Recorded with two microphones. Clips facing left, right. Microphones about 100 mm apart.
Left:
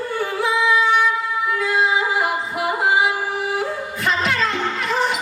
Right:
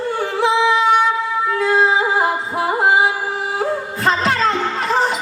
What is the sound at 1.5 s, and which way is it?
Music, 35° right (ahead or behind).